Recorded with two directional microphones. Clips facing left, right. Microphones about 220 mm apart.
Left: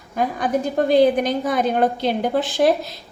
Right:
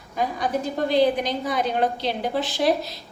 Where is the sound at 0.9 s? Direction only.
50° left (ahead or behind).